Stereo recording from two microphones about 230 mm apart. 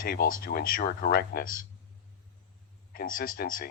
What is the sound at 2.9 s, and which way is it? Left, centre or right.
Speech, left.